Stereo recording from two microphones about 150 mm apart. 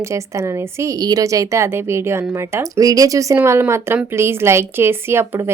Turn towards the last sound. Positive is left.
turn(degrees=-15)  # may be behind; listen again after turning